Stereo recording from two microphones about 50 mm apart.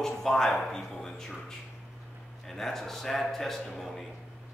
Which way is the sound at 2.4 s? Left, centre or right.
Centre.